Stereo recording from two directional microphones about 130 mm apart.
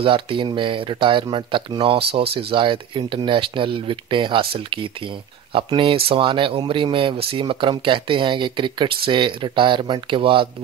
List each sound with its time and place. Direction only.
0.0 s speech: 40° right (ahead or behind)